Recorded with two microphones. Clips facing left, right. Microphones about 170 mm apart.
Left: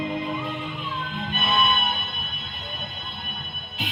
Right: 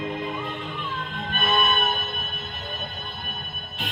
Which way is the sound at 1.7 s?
40° right (ahead or behind).